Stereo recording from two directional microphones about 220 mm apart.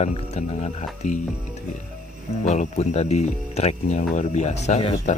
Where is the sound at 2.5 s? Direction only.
30° left (ahead or behind).